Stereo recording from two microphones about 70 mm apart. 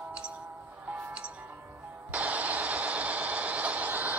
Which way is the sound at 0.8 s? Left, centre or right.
Centre.